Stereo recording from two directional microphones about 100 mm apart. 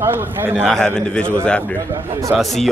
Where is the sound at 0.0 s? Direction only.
20° right (ahead or behind).